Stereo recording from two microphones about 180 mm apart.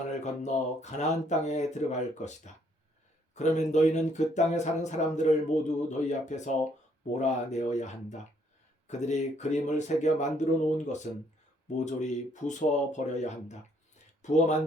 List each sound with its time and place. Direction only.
0.0 s speech: 40° left (ahead or behind)